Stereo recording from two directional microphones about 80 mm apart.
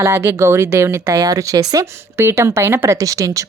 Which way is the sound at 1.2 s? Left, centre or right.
Right.